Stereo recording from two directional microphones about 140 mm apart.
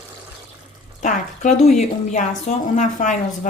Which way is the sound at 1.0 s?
60° left (ahead or behind).